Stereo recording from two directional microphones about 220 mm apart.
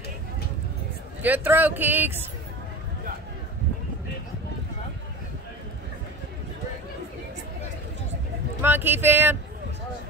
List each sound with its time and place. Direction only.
1.2 s speech: 10° right (ahead or behind)
8.5 s speech: 10° right (ahead or behind)